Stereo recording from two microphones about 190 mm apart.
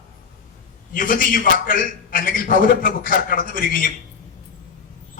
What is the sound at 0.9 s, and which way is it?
A man's voice, 45° left (ahead or behind).